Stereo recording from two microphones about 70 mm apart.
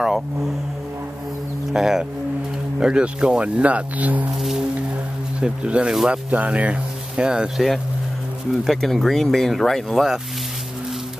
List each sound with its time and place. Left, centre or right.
1.7 s speech: centre
4.4 s speech: centre
5.4 s speech: centre